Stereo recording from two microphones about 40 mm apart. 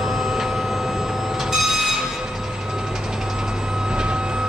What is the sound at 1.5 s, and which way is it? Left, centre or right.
Train, centre.